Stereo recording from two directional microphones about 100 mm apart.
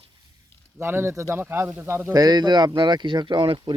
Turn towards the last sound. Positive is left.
turn(degrees=-55)  # may be behind; listen again after turning